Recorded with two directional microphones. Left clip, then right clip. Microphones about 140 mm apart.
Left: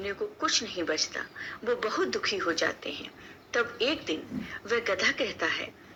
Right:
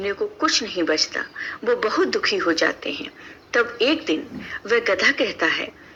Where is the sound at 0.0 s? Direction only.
45° right (ahead or behind).